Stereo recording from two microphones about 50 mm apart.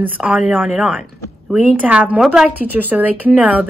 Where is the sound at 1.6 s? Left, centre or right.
Right.